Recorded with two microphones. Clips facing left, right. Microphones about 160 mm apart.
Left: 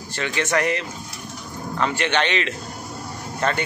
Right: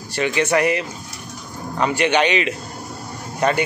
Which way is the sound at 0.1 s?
10° right (ahead or behind).